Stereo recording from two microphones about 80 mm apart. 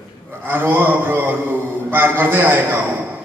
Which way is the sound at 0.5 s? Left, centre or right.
Right.